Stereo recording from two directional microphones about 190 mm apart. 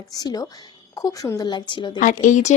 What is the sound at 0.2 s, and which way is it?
Speech, 20° left (ahead or behind).